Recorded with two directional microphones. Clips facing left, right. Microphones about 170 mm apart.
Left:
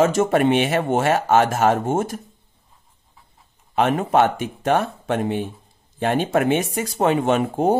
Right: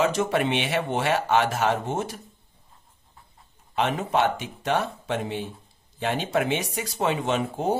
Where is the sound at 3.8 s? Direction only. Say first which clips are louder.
Left 6 dB; 50° left (ahead or behind).